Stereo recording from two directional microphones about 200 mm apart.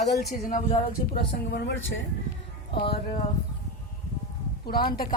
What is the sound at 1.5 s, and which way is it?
Speech, 60° left (ahead or behind).